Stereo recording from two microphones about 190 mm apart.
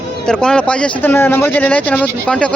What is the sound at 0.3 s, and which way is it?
Speech, 5° left (ahead or behind).